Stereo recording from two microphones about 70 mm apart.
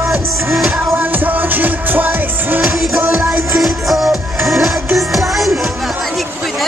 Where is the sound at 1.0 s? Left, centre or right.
Right.